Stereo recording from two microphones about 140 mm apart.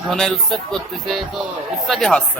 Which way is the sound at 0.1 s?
Centre (ahead or behind).